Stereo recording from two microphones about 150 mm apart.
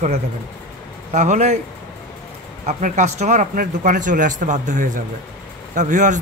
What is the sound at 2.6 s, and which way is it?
Speech, 50° right (ahead or behind).